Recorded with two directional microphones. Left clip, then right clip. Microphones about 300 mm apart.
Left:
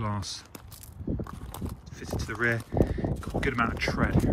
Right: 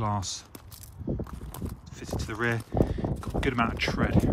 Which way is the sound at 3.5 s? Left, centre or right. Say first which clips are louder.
Right 1 dB; centre.